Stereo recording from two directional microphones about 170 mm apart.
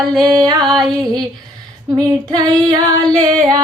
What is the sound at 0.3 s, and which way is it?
Music, 25° right (ahead or behind).